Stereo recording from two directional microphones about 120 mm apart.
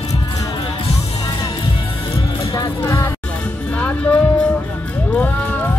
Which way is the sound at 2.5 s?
25° left (ahead or behind).